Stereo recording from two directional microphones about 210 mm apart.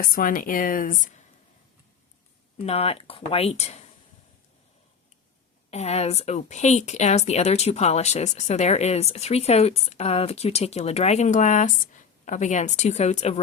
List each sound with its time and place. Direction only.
0.0 s speech: 40° left (ahead or behind)
2.6 s speech: 30° left (ahead or behind)
5.7 s speech: 30° left (ahead or behind)